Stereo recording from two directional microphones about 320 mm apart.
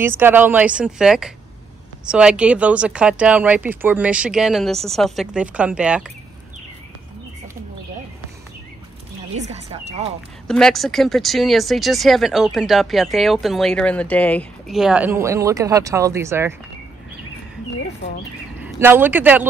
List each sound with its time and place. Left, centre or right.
0.0 s speech: centre
9.3 s speech: centre
10.4 s speech: centre
18.6 s a man's voice: centre